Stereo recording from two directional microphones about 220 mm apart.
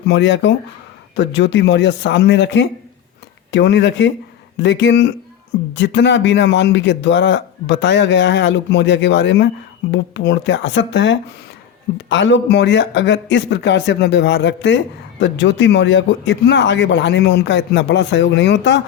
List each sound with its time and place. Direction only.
0.1 s speech: 55° left (ahead or behind)